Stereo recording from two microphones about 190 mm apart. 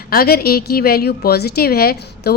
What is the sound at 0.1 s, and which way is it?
A woman's voice, 50° left (ahead or behind).